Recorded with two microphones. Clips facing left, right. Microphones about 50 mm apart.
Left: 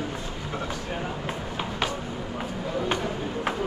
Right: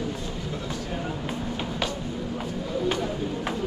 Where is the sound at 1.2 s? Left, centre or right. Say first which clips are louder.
Right 1 dB; centre.